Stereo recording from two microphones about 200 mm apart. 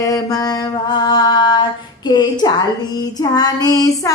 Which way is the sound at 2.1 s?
20° left (ahead or behind).